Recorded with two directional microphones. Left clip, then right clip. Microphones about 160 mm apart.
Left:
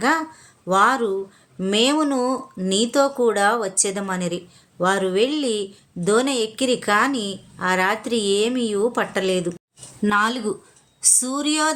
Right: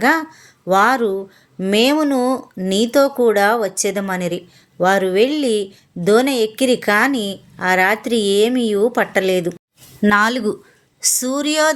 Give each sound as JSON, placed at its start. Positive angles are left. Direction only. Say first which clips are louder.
{"t": 0.0, "sound": "speech", "louder": "right 4 dB", "side_deg": -35}
{"t": 10.0, "sound": "speech", "louder": "right 5 dB", "side_deg": -45}